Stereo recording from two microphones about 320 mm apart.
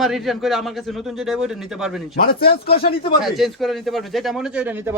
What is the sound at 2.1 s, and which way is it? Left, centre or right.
Speech, left.